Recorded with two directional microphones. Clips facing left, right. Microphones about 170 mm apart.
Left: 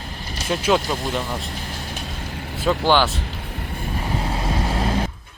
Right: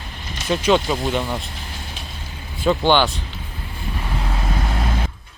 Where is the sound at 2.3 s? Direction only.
70° left (ahead or behind).